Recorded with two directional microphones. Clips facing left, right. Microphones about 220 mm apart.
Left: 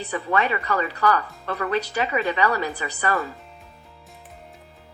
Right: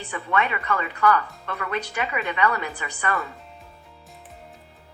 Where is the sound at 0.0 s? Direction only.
35° left (ahead or behind).